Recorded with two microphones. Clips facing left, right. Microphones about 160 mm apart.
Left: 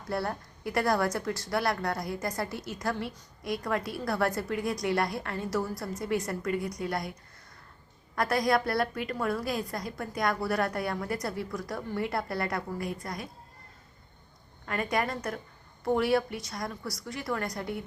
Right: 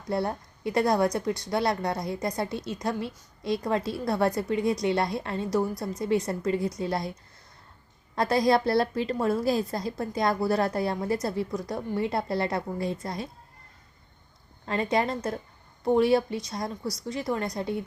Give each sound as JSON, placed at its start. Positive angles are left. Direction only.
{"t": 0.1, "sound": "a woman's voice", "side_deg": -20}
{"t": 8.1, "sound": "a woman's voice", "side_deg": -25}
{"t": 14.7, "sound": "a woman's voice", "side_deg": -25}